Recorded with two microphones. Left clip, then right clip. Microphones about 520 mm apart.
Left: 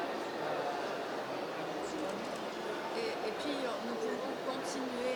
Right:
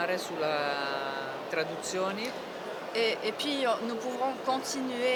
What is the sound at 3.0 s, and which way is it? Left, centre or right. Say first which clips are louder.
Speech: right 12 dB; right.